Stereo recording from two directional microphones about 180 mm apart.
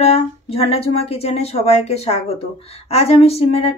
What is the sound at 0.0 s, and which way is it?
Speech, 35° left (ahead or behind).